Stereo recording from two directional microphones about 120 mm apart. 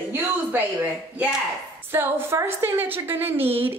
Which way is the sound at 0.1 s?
15° right (ahead or behind).